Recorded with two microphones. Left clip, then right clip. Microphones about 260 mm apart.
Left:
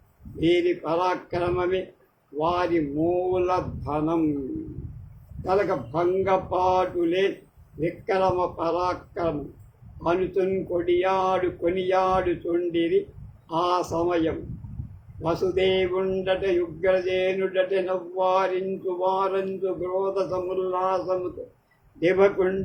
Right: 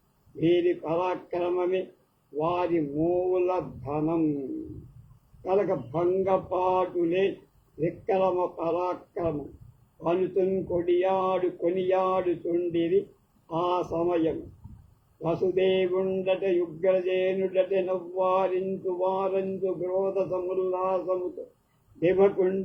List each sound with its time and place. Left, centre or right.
0.4 s speech: left
5.5 s a man's voice: left
13.5 s a man's voice: left